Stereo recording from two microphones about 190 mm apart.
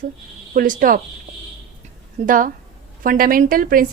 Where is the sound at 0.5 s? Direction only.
45° right (ahead or behind).